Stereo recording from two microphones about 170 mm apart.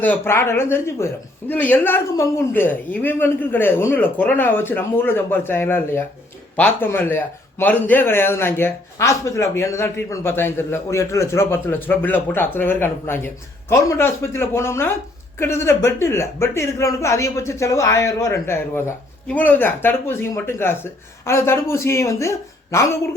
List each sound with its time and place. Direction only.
0.0 s speech: 10° left (ahead or behind)